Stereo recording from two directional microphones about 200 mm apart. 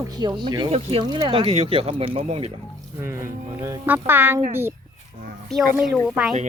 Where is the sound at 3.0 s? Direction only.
15° right (ahead or behind).